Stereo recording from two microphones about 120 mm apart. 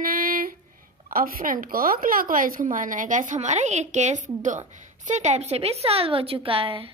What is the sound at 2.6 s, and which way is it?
A woman's voice, 90° right.